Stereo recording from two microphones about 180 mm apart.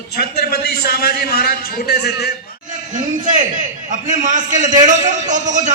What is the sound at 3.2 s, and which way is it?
A man's voice, 45° right (ahead or behind).